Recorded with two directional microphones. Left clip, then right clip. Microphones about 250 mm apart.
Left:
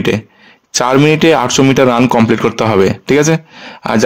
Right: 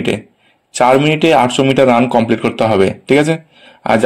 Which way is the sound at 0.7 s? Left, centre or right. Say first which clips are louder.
Even; left.